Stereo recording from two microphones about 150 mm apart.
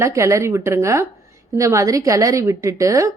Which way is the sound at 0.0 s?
20° right (ahead or behind).